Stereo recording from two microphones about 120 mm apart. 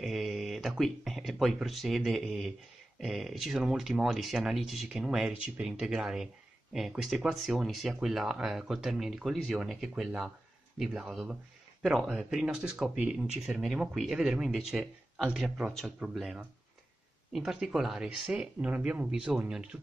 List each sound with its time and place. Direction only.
0.0 s speech: centre (ahead or behind)